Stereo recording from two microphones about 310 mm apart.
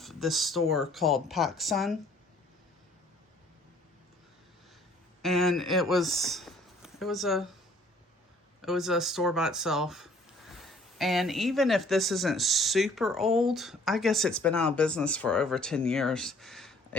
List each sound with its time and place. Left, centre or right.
0.0 s speech: centre
5.2 s speech: centre
8.6 s speech: centre